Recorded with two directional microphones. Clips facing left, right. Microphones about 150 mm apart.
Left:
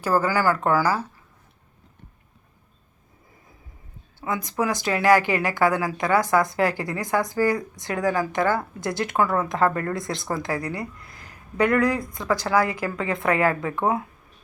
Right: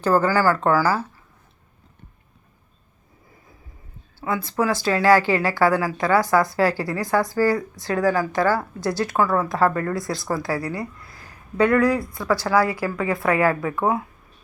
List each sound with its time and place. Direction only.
0.0 s speech: 10° left (ahead or behind)
4.2 s speech: 20° left (ahead or behind)
11.0 s a sound: 20° left (ahead or behind)
12.1 s speech: 20° left (ahead or behind)